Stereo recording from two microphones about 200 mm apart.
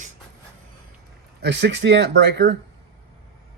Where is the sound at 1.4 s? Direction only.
60° right (ahead or behind).